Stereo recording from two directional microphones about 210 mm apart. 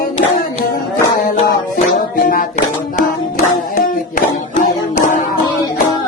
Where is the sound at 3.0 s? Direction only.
40° left (ahead or behind).